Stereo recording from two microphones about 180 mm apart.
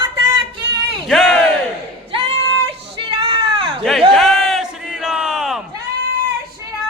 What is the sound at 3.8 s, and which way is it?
Battle cry, centre (ahead or behind).